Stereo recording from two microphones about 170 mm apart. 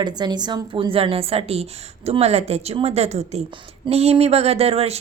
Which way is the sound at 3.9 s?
35° right (ahead or behind).